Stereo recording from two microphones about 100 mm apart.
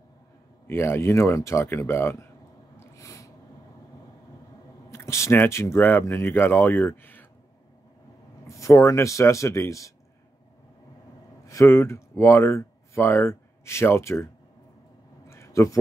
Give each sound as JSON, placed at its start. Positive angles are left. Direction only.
{"t": 0.7, "sound": "speech", "side_deg": 25}
{"t": 2.8, "sound": "snort", "side_deg": 30}
{"t": 4.9, "sound": "speech", "side_deg": 30}
{"t": 8.5, "sound": "speech", "side_deg": 30}
{"t": 11.4, "sound": "speech", "side_deg": 30}
{"t": 15.2, "sound": "a sound", "side_deg": 30}